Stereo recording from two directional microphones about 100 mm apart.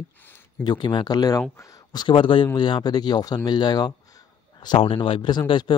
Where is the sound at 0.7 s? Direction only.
50° left (ahead or behind).